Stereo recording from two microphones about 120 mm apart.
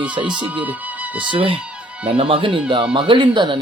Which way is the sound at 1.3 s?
45° right (ahead or behind).